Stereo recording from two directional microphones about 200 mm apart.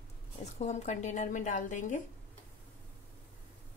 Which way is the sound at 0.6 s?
35° left (ahead or behind).